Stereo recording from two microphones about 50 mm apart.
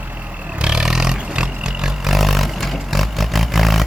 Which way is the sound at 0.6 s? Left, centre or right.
Centre.